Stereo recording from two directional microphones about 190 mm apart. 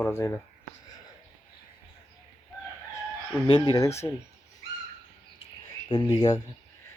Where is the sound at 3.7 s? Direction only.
15° left (ahead or behind).